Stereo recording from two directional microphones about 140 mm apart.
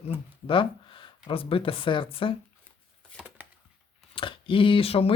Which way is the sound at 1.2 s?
40° left (ahead or behind).